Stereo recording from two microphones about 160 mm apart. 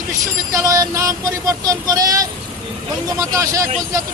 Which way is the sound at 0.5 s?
20° right (ahead or behind).